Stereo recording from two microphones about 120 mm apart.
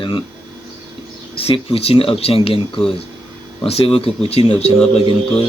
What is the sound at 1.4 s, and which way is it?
Speech, 55° left (ahead or behind).